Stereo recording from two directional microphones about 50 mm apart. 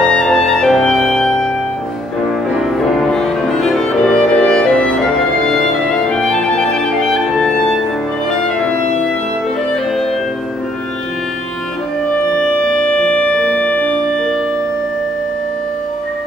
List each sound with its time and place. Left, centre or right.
0.0 s music: centre
2.8 s music: centre
7.3 s clarinet: centre
8.3 s clarinet: centre
12.1 s music: centre
14.1 s music: centre